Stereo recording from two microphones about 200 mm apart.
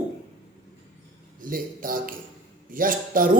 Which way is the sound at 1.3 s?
45° right (ahead or behind).